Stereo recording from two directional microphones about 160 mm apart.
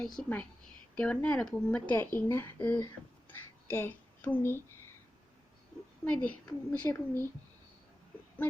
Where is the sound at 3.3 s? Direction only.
15° left (ahead or behind).